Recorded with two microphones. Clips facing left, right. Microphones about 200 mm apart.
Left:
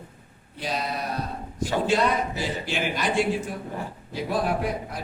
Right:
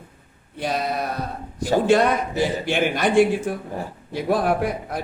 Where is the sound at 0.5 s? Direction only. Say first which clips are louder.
Right 5 dB; 55° right (ahead or behind).